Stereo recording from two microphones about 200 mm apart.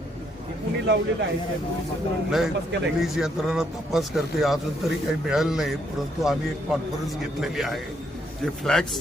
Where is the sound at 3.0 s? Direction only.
Centre (ahead or behind).